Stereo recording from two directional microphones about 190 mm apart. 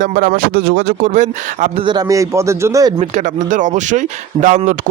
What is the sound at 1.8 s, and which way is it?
A man's voice, 20° right (ahead or behind).